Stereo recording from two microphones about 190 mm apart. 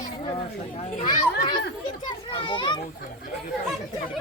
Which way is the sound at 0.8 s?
30° left (ahead or behind).